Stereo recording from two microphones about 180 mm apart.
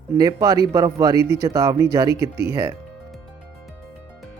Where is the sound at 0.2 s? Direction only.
20° right (ahead or behind).